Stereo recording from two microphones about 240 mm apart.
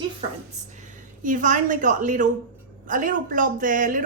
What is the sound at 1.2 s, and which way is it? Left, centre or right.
A woman's voice, right.